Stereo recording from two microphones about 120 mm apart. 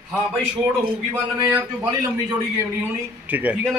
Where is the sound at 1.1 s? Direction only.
15° right (ahead or behind).